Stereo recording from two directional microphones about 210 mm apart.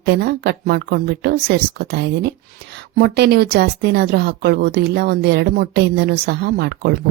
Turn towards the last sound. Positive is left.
turn(degrees=-50)  # may be behind; listen again after turning